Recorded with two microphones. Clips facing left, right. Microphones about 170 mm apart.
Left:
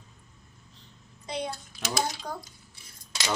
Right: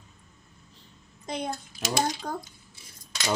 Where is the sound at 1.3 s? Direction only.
45° right (ahead or behind).